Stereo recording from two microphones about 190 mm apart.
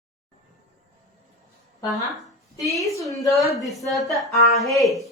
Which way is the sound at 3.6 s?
Centre (ahead or behind).